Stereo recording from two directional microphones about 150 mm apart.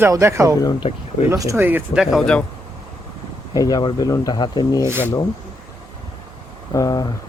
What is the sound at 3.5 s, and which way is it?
Speech, 25° left (ahead or behind).